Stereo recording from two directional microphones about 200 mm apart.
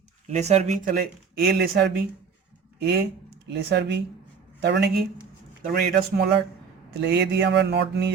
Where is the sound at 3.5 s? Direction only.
60° right (ahead or behind).